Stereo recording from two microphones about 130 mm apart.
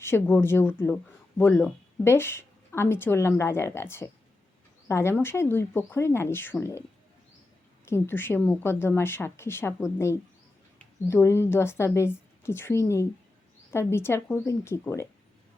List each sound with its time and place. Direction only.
0.0 s a woman's voice: 20° left (ahead or behind)
7.9 s a woman's voice: 20° left (ahead or behind)